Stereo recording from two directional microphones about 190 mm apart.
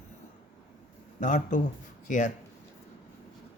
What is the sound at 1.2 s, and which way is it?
Speech, 40° left (ahead or behind).